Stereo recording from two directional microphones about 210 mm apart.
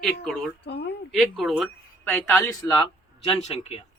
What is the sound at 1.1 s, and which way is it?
Speech, centre (ahead or behind).